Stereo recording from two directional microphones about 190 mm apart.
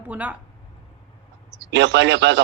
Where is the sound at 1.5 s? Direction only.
70° right (ahead or behind).